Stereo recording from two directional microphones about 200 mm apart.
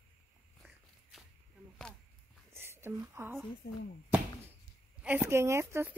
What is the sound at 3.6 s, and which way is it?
Speech, 50° left (ahead or behind).